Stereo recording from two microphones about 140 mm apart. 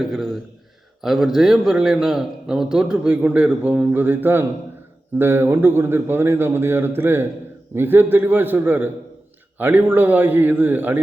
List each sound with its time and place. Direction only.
0.0 s a man's voice: centre (ahead or behind)